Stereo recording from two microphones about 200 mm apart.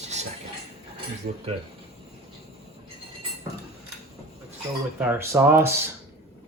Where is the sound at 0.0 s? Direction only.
35° right (ahead or behind).